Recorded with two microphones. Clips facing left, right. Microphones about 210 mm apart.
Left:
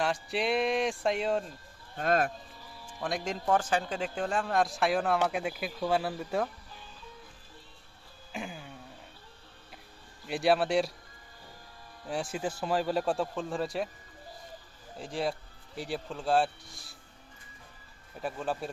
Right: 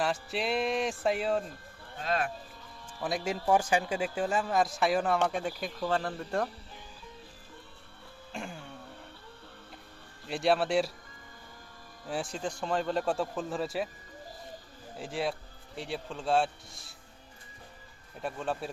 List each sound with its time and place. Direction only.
0.0 s a man's voice: centre (ahead or behind)
2.0 s speech: 45° left (ahead or behind)
3.0 s a man's voice: 5° right (ahead or behind)
8.3 s a sound: 5° left (ahead or behind)
10.2 s a man's voice: centre (ahead or behind)
12.0 s a man's voice: centre (ahead or behind)
14.9 s a man's voice: centre (ahead or behind)
18.2 s a man's voice: centre (ahead or behind)